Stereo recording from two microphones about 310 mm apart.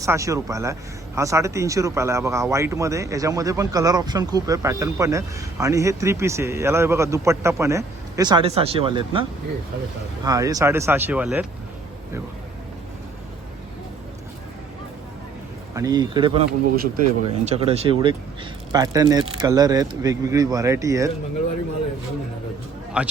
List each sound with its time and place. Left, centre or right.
0.0 s speech: centre
10.2 s speech: centre
15.7 s speech: centre
23.0 s speech: centre